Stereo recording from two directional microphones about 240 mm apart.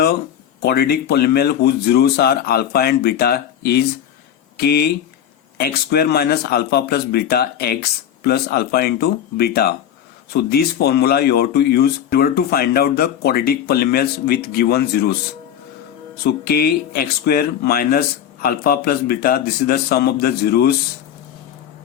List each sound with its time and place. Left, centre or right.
0.6 s speech: left
16.2 s speech: left